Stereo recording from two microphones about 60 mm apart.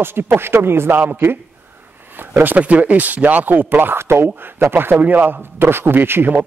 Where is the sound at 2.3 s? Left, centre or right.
Right.